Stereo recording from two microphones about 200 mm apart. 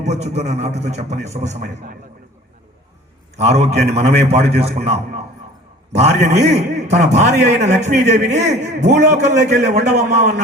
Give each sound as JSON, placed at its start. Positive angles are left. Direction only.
{"t": 0.0, "sound": "a man's voice", "side_deg": -35}
{"t": 3.3, "sound": "a man's voice", "side_deg": -35}
{"t": 5.9, "sound": "a man's voice", "side_deg": -35}